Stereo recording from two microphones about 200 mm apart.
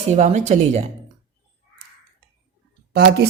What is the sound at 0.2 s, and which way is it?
Speech, 35° right (ahead or behind).